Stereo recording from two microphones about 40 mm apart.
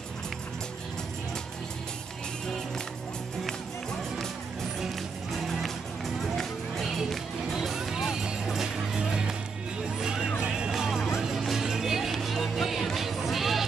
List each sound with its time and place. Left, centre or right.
4.9 s music: centre; by 10.7 s right
10.7 s music: centre